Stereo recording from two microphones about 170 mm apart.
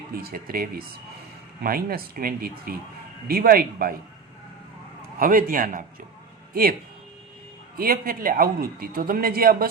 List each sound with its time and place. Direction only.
0.1 s speech: 60° right (ahead or behind)
5.2 s speech: 55° right (ahead or behind)
7.8 s speech: 60° right (ahead or behind)